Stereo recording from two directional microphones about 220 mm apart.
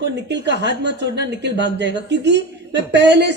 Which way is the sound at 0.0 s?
50° right (ahead or behind).